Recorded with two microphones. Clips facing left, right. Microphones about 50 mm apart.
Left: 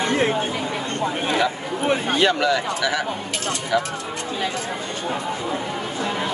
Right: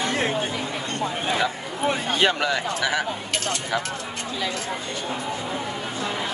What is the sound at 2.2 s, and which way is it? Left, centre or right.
Speech, centre.